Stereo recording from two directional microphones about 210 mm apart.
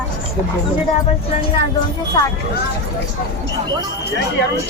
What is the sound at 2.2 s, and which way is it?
Speech, 20° left (ahead or behind).